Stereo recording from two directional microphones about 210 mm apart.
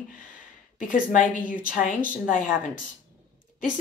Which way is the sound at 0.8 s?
40° left (ahead or behind).